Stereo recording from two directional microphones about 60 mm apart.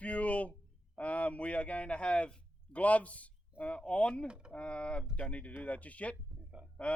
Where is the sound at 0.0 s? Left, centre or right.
Left.